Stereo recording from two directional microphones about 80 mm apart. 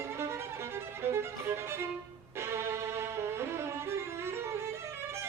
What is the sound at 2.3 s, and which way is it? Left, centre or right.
Music, right.